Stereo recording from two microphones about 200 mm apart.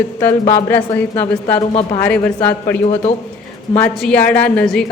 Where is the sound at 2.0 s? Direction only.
5° left (ahead or behind).